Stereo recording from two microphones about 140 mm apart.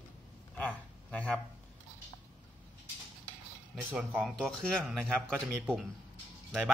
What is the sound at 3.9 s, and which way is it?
A man's voice, 10° right (ahead or behind).